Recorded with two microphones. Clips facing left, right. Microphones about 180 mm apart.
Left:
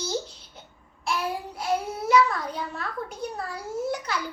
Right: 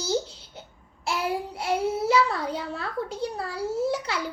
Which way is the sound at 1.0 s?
25° right (ahead or behind).